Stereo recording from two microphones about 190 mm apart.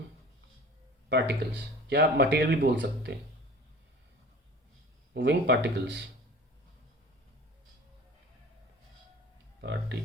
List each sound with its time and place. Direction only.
1.1 s speech: 65° right (ahead or behind)
5.1 s speech: 65° right (ahead or behind)
9.6 s speech: 65° right (ahead or behind)